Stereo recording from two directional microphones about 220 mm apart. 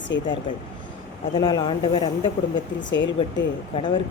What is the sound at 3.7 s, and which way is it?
Speech, 20° left (ahead or behind).